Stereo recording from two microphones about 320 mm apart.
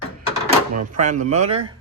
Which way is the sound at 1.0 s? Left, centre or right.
Right.